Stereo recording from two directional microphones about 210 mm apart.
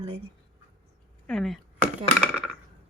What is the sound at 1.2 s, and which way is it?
Speech, centre (ahead or behind).